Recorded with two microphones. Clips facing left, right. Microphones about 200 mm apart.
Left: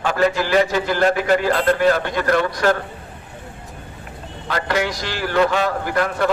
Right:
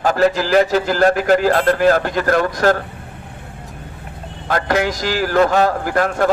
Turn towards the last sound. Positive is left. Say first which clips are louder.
# right 3 dB
turn(degrees=-45)  # may be behind; listen again after turning